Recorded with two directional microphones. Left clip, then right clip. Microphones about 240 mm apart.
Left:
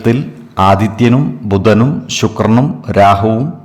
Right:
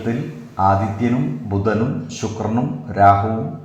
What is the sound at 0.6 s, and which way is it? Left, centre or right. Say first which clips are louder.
A man's voice: left 7 dB; left.